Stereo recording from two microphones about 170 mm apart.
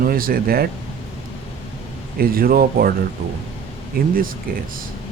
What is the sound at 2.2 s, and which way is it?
Speech, 60° right (ahead or behind).